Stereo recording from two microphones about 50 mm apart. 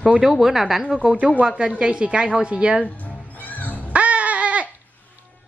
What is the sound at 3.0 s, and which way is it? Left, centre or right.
Music, left.